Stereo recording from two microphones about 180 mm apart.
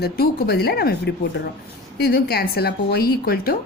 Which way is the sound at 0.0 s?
60° left (ahead or behind).